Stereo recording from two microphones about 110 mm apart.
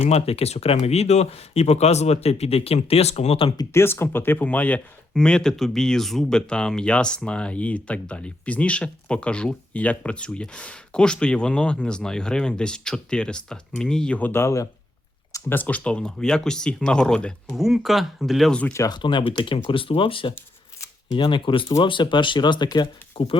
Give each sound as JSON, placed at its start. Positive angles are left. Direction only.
{"t": 0.1, "sound": "speech", "side_deg": 70}
{"t": 3.7, "sound": "speech", "side_deg": 25}
{"t": 17.5, "sound": "speech", "side_deg": 0}
{"t": 18.9, "sound": "speech", "side_deg": 50}
{"t": 23.1, "sound": "speech", "side_deg": 55}